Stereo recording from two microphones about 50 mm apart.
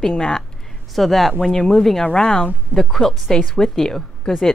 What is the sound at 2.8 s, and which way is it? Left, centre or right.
A woman's voice, centre.